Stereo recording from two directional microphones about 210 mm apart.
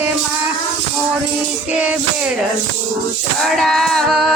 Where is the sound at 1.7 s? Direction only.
5° right (ahead or behind).